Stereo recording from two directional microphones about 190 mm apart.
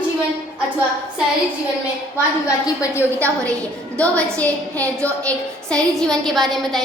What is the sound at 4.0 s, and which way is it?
A woman's voice, 5° left (ahead or behind).